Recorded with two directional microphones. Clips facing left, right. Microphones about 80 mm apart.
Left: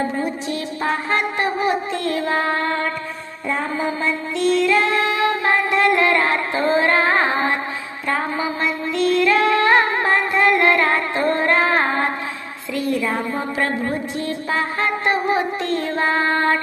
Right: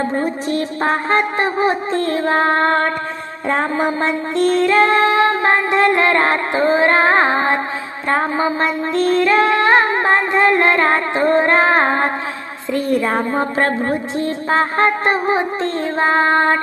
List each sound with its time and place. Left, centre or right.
0.2 s wind instrument: right
3.5 s female singing: right
8.0 s mantra: right
8.6 s music: right
12.7 s wind instrument: right
13.9 s music: right